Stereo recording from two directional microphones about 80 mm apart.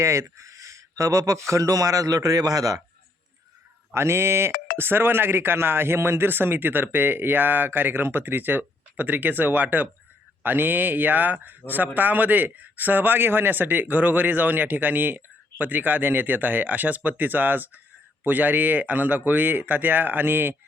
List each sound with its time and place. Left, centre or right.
0.0 s speech: right
3.9 s speech: right